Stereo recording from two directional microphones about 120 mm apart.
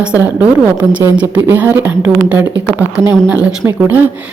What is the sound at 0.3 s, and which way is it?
A woman's voice, 15° right (ahead or behind).